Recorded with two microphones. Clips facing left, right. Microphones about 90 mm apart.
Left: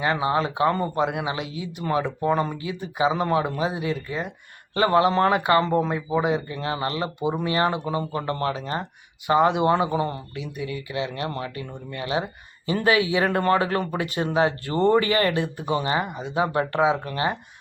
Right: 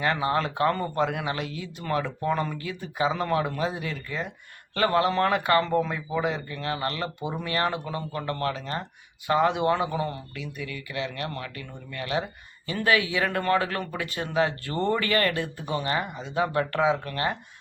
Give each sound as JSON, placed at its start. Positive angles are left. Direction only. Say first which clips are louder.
{"t": 0.0, "sound": "speech", "louder": "left 2 dB", "side_deg": 15}